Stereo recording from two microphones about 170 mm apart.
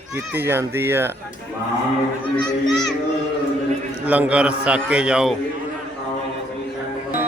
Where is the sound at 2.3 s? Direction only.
Centre (ahead or behind).